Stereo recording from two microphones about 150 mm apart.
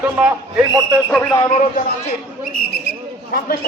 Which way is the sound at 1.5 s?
55° left (ahead or behind).